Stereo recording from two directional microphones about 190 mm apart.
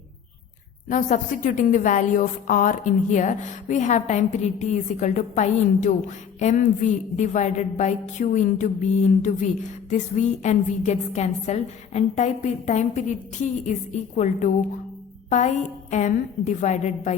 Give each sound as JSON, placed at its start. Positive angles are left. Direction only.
{"t": 0.9, "sound": "a woman's voice", "side_deg": 45}